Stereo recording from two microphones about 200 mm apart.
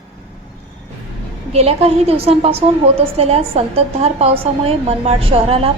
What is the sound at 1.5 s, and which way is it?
A woman's voice, 30° right (ahead or behind).